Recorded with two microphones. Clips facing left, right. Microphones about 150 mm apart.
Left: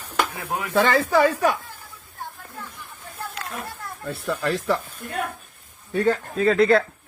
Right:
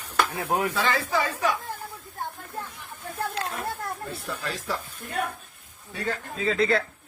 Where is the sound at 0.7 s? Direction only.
55° left (ahead or behind).